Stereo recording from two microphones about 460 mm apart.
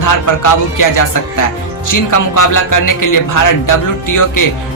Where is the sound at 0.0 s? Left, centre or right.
Left.